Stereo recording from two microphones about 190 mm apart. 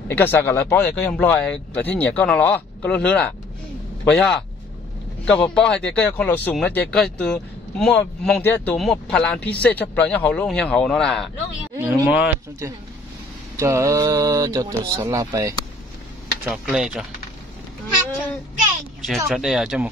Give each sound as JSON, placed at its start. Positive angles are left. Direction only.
{"t": 0.1, "sound": "speech", "side_deg": 10}
{"t": 11.8, "sound": "speech", "side_deg": -10}
{"t": 16.4, "sound": "speech", "side_deg": -5}
{"t": 19.0, "sound": "speech", "side_deg": 0}